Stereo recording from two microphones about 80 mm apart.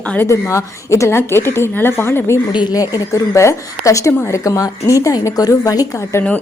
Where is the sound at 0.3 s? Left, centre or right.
Left.